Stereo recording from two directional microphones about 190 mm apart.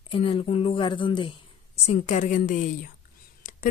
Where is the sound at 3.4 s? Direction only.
45° left (ahead or behind).